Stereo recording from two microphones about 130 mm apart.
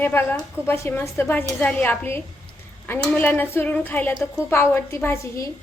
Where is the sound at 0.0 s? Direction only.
15° left (ahead or behind).